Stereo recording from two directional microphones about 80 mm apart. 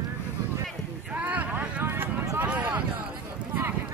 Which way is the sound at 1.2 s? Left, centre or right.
Centre.